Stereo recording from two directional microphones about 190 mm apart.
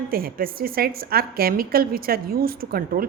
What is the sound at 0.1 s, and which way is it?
A woman's voice, 50° right (ahead or behind).